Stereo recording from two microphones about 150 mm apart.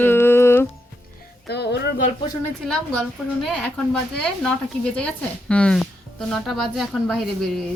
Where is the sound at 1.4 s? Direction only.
90° left.